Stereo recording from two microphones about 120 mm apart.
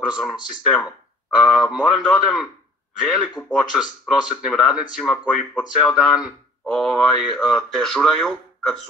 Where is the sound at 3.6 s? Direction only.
Centre (ahead or behind).